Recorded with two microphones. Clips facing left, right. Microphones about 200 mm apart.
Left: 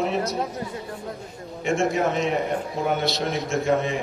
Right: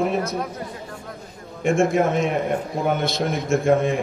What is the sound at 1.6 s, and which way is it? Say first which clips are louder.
A man's voice: right 4 dB; 50° right (ahead or behind).